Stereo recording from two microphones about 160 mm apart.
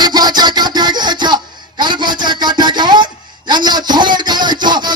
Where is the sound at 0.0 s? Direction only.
25° right (ahead or behind).